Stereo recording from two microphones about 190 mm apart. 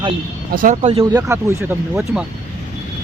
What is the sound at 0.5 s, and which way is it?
Speech, 45° right (ahead or behind).